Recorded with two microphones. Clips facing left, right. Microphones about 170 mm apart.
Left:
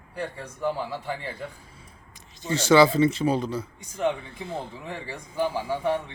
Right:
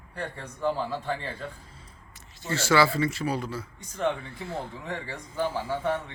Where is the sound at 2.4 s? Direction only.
20° left (ahead or behind).